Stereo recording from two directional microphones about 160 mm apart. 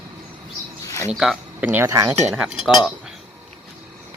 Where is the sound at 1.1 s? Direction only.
Centre (ahead or behind).